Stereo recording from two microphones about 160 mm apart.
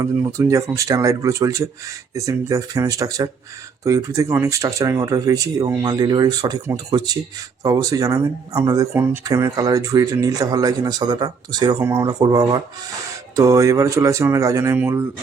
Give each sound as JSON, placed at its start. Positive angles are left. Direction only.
{"t": 0.0, "sound": "speech", "side_deg": -20}